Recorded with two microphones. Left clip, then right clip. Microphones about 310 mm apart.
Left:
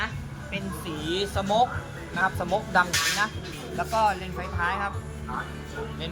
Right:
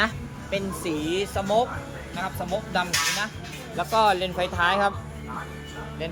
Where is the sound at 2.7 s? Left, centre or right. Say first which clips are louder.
Left 1 dB; centre.